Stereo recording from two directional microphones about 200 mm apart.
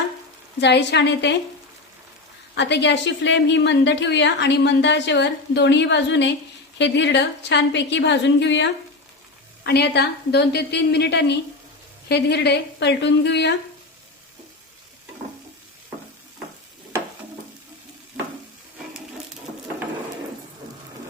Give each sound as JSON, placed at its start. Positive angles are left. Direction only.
{"t": 0.6, "sound": "a woman's voice", "side_deg": 60}
{"t": 2.6, "sound": "a woman's voice", "side_deg": 60}